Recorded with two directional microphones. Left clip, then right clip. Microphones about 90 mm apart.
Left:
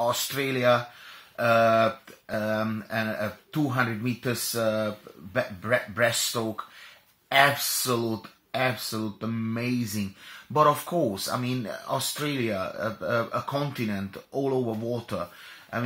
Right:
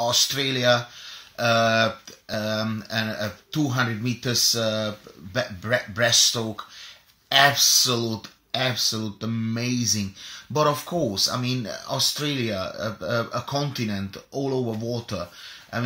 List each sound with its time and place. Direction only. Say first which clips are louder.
0.0 s speech: right 4 dB; 15° right (ahead or behind)
11.2 s speech: right 4 dB; 35° right (ahead or behind)
11.6 s speech: right 4 dB; 20° right (ahead or behind)
12.4 s speech: right 1 dB; 10° right (ahead or behind)